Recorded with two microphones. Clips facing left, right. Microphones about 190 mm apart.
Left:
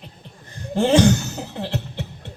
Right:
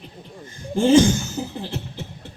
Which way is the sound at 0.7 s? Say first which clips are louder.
Right 1 dB; 65° left (ahead or behind).